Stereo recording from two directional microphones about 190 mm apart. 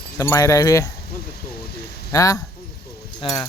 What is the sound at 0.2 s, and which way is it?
Mantra, 15° left (ahead or behind).